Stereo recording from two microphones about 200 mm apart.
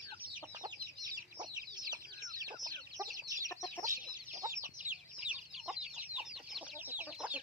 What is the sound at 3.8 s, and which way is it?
Chicken, 15° right (ahead or behind).